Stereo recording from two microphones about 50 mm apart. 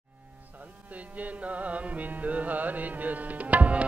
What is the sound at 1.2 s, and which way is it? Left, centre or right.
Music, right.